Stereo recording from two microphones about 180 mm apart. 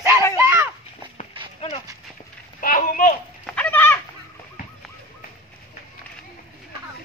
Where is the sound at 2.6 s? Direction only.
50° left (ahead or behind).